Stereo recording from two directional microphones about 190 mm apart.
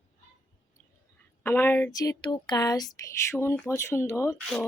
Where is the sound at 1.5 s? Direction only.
10° left (ahead or behind).